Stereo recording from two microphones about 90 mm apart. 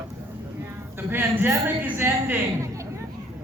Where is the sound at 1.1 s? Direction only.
25° right (ahead or behind).